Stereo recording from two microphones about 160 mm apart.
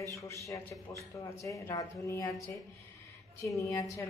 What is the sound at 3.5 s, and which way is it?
Speech, 20° left (ahead or behind).